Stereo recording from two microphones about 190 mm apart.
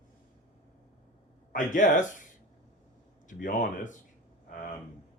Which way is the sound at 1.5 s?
45° left (ahead or behind).